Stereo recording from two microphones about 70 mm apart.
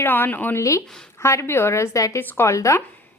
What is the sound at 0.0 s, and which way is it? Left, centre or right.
Speech, left.